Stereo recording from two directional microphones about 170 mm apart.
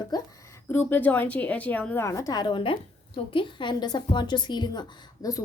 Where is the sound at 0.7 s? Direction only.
10° left (ahead or behind).